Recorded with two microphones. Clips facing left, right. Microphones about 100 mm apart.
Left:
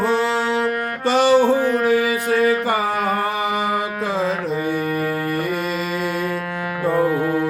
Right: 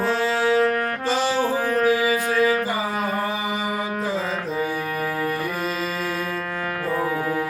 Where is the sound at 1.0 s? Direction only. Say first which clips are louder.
Left 9 dB; 65° left (ahead or behind).